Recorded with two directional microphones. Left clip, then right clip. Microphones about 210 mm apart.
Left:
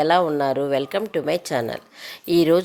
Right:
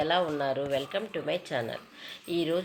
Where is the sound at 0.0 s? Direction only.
55° left (ahead or behind).